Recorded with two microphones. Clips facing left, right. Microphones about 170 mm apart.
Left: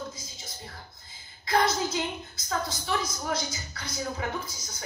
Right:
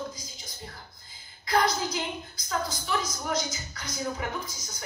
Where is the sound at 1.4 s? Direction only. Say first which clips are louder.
Even; 25° left (ahead or behind).